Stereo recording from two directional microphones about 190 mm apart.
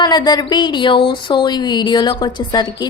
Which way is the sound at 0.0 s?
20° left (ahead or behind).